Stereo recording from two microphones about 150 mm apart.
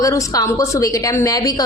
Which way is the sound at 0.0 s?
20° left (ahead or behind).